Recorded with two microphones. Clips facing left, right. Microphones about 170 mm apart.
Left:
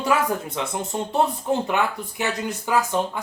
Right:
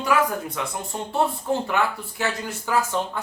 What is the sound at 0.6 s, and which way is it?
Speech, 20° left (ahead or behind).